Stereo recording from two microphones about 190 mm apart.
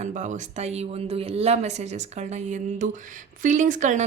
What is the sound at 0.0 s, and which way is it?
Speech, 40° right (ahead or behind).